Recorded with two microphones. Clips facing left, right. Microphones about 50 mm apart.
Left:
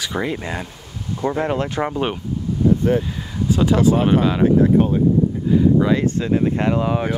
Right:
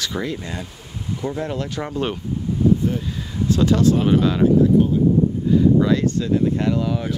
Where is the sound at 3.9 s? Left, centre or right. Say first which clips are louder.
Left 1 dB; left.